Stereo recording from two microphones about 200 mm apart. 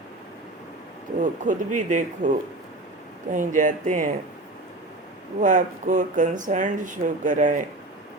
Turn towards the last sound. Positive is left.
turn(degrees=-40)  # may be behind; listen again after turning